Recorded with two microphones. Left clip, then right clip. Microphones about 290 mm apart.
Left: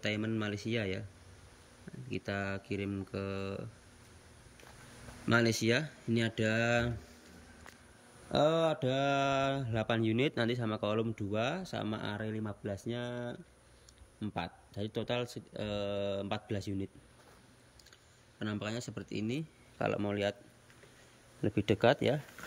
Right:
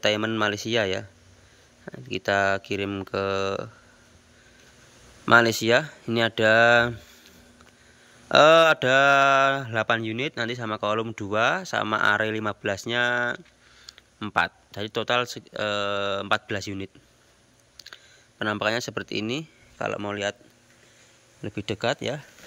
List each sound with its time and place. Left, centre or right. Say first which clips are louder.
0.0 s speech: right 13 dB; centre
1.9 s a sound: right 13 dB; right
2.6 s speech: right 10 dB; centre
2.9 s speech: right 13 dB; right
5.2 s speech: right 12 dB; centre
8.5 s speech: right 14 dB; centre
12.2 s speech: right 14 dB; centre
13.1 s speech: right 16 dB; centre
18.4 s speech: right 15 dB; centre
21.4 s speech: right 1 dB; centre